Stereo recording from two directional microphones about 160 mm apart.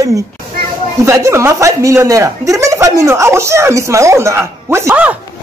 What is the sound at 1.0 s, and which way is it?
A man's voice, 15° right (ahead or behind).